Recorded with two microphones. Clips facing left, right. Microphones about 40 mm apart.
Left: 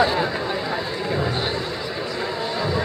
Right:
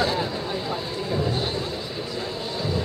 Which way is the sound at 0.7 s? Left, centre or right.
Left.